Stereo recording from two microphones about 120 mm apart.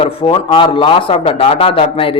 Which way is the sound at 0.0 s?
45° left (ahead or behind).